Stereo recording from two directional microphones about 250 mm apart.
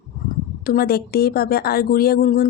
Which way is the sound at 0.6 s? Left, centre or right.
Left.